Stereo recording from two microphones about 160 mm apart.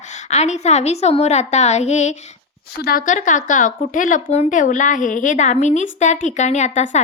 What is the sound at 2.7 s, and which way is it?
Speech, 65° left (ahead or behind).